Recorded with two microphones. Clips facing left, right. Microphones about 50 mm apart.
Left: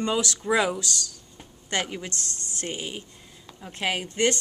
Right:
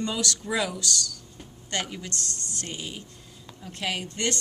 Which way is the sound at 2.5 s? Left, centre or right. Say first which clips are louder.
Left 6 dB; left.